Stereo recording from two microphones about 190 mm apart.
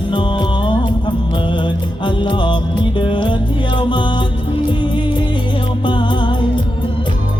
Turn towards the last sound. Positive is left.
turn(degrees=25)  # may be behind; listen again after turning